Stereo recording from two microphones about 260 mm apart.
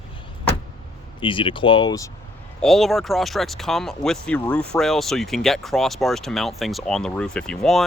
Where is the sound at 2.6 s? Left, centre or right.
Centre.